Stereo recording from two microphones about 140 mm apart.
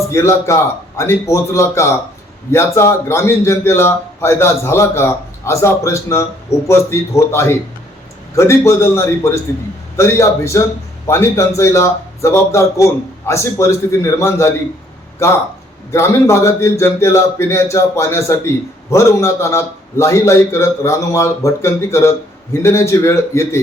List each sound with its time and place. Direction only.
0.1 s a man's voice: 20° left (ahead or behind)
15.9 s a man's voice: 20° left (ahead or behind)